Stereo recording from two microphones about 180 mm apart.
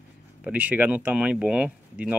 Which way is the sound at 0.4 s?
10° right (ahead or behind).